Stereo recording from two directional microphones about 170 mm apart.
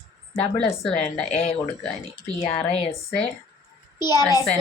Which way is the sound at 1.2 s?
40° left (ahead or behind).